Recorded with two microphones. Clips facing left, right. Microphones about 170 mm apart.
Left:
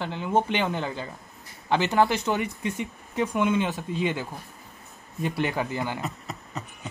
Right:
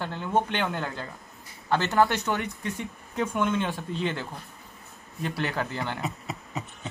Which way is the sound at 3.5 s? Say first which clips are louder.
Left 3 dB; 15° left (ahead or behind).